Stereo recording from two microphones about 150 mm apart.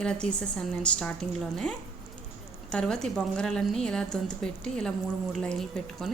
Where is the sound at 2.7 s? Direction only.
5° left (ahead or behind).